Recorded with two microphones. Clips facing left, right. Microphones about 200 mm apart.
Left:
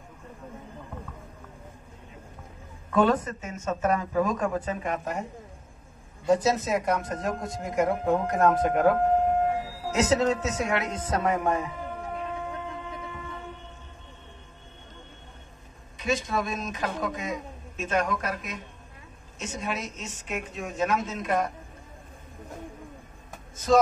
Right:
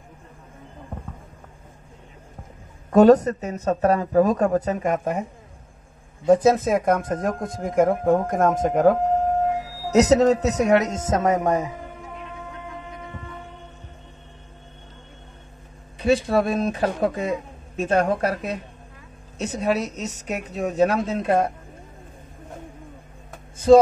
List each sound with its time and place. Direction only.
2.9 s speech: 40° right (ahead or behind)
6.2 s speech: 55° right (ahead or behind)
16.0 s speech: 35° right (ahead or behind)